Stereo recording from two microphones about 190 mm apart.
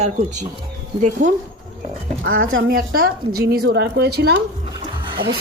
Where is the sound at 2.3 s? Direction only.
90° right.